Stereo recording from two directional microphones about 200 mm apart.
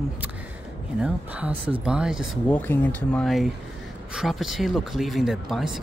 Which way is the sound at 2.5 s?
10° left (ahead or behind).